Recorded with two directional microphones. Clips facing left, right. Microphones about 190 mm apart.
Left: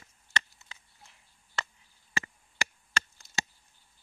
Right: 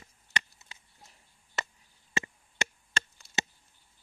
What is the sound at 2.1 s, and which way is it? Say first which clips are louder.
Chop: right 2 dB; 25° right (ahead or behind).